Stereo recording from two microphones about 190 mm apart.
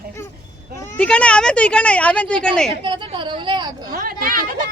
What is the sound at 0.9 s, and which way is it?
Speech, 5° left (ahead or behind).